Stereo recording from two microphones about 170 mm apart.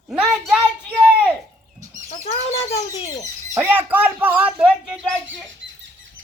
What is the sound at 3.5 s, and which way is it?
Speech, 10° right (ahead or behind).